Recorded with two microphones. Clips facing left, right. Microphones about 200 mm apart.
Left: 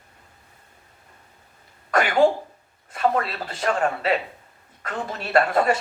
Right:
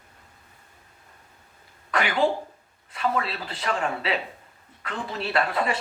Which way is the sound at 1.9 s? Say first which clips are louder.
Left 4 dB; 45° left (ahead or behind).